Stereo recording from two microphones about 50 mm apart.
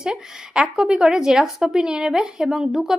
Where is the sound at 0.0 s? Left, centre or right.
Centre.